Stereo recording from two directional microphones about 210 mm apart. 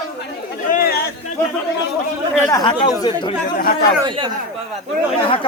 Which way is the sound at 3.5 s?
40° left (ahead or behind).